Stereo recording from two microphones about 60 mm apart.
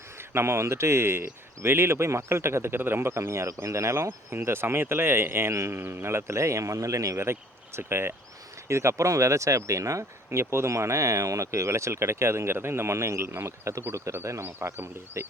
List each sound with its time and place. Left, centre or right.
0.2 s speech: right
7.2 s speech: right
8.6 s speech: right
10.2 s speech: right